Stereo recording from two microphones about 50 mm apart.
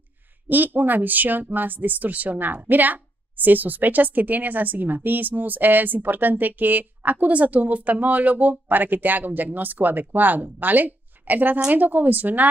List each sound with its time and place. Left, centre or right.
0.5 s speech: right